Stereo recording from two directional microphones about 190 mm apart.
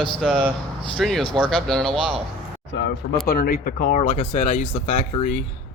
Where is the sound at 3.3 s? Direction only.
45° left (ahead or behind).